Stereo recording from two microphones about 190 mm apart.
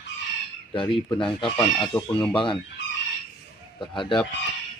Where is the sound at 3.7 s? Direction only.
25° left (ahead or behind).